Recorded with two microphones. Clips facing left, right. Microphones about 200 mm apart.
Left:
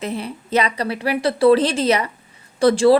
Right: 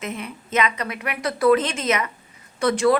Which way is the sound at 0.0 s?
35° left (ahead or behind).